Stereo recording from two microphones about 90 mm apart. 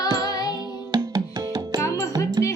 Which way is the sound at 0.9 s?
50° right (ahead or behind).